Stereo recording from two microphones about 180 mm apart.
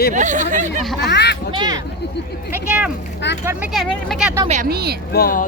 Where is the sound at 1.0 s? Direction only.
70° left (ahead or behind).